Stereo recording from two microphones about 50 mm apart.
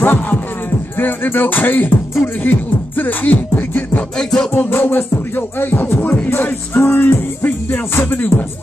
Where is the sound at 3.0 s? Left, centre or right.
Left.